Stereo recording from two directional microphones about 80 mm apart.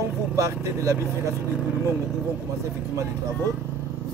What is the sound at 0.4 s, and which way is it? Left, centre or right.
Speech, right.